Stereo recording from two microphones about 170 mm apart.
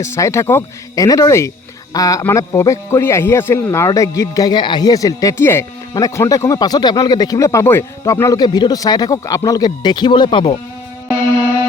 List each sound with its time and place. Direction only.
0.0 s a man's voice: 15° left (ahead or behind)